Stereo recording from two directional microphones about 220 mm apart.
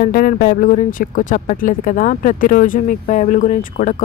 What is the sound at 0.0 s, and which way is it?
Speech, 40° left (ahead or behind).